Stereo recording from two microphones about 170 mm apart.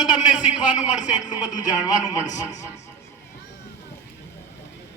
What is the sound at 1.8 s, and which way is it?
Speech, 20° left (ahead or behind).